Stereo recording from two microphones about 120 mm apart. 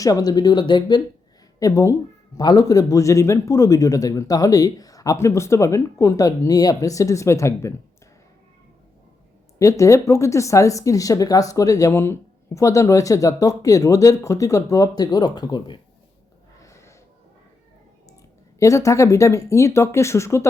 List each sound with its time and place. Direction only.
0.0 s a man's voice: 30° left (ahead or behind)
9.6 s a man's voice: 25° left (ahead or behind)
16.6 s snort: 25° left (ahead or behind)
18.6 s a man's voice: 25° left (ahead or behind)